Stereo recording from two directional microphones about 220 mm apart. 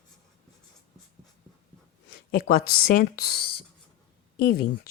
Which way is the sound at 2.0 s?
40° left (ahead or behind).